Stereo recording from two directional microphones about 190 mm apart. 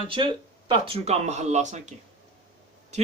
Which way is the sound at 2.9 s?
35° right (ahead or behind).